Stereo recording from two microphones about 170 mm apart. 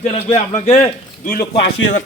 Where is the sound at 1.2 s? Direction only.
55° left (ahead or behind).